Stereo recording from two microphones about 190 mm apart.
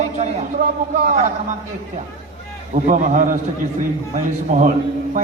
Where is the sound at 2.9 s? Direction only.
45° right (ahead or behind).